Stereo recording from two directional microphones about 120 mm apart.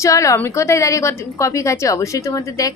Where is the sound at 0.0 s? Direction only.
25° left (ahead or behind).